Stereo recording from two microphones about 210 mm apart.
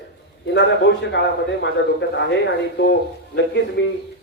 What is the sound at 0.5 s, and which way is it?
A man's voice, 55° left (ahead or behind).